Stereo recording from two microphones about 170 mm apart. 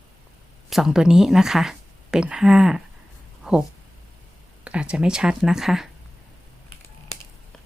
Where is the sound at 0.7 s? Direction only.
Centre (ahead or behind).